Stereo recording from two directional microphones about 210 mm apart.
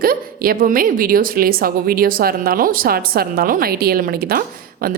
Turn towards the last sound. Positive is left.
turn(degrees=-45)  # may be behind; listen again after turning